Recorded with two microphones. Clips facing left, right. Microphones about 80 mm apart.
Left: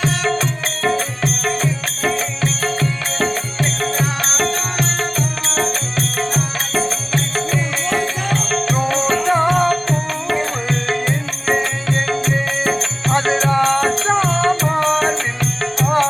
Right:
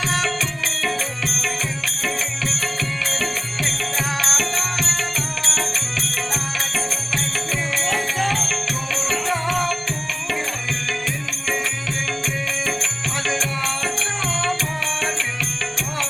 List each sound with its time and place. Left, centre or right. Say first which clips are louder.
0.8 s music: left 7 dB; left